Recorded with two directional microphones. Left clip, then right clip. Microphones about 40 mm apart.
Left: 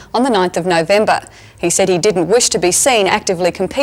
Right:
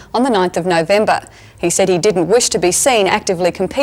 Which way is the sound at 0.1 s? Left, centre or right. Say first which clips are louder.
Left 1 dB; left.